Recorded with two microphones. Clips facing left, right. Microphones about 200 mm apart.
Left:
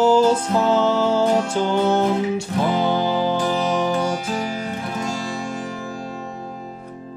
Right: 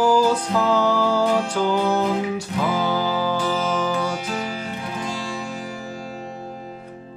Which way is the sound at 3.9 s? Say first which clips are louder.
Left 2 dB; 50° left (ahead or behind).